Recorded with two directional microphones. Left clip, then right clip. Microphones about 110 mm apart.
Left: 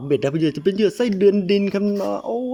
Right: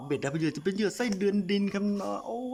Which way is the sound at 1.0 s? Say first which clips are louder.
Left 12 dB; 35° left (ahead or behind).